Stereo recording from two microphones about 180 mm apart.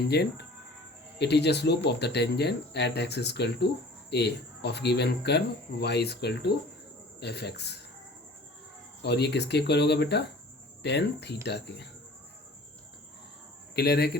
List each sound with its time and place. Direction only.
0.1 s speech: 65° left (ahead or behind)
9.0 s speech: 70° left (ahead or behind)
13.7 s speech: 65° left (ahead or behind)